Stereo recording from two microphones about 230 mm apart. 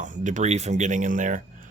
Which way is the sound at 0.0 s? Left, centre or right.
Right.